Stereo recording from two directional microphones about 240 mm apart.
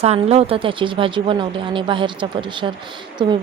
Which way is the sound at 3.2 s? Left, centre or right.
Centre.